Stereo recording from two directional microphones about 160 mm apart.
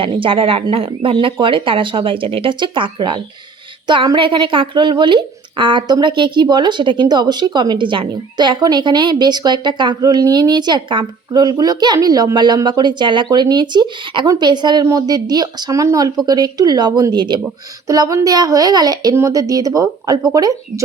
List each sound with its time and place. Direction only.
0.0 s a woman's voice: 35° right (ahead or behind)